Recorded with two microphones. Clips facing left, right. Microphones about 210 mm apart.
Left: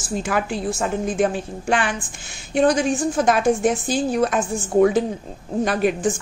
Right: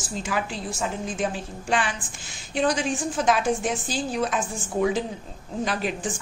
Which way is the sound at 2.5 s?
50° left (ahead or behind).